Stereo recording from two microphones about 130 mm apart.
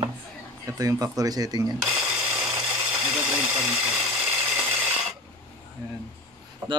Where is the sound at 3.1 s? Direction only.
10° right (ahead or behind).